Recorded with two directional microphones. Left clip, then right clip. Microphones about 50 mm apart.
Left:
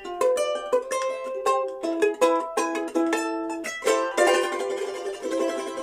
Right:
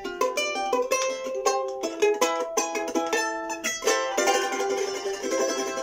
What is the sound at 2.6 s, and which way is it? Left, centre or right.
Music, centre.